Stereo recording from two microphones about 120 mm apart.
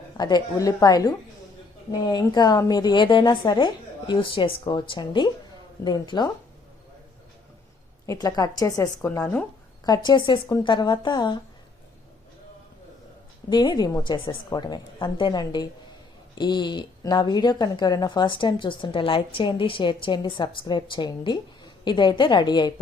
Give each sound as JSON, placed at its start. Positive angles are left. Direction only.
{"t": 0.2, "sound": "a woman's voice", "side_deg": 35}
{"t": 8.0, "sound": "a woman's voice", "side_deg": 30}
{"t": 9.2, "sound": "speech", "side_deg": 10}
{"t": 9.8, "sound": "a woman's voice", "side_deg": 35}
{"t": 13.5, "sound": "a woman's voice", "side_deg": 35}